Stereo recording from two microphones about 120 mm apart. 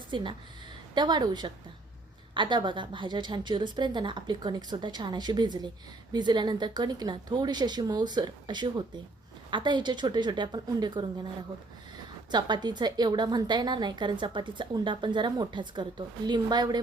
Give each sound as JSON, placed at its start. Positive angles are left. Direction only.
{"t": 0.1, "sound": "a woman's voice", "side_deg": -40}
{"t": 12.3, "sound": "a woman's voice", "side_deg": -35}